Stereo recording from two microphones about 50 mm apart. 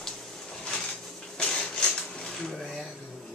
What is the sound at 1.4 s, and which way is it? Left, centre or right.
Dishes, centre.